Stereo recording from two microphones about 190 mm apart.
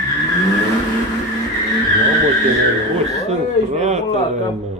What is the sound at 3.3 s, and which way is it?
Speech, 35° right (ahead or behind).